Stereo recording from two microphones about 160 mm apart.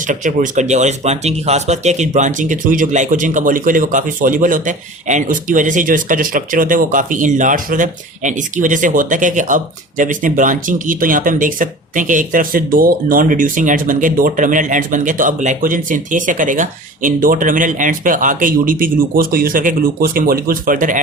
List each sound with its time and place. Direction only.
0.1 s speech: 55° right (ahead or behind)